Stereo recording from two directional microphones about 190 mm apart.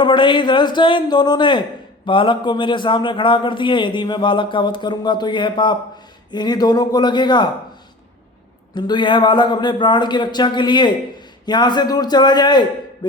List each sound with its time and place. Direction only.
0.0 s a man's voice: 25° left (ahead or behind)
8.7 s a man's voice: 25° left (ahead or behind)
13.0 s a sound: 20° left (ahead or behind)